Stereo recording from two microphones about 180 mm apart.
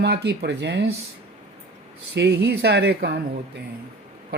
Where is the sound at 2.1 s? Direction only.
70° right (ahead or behind).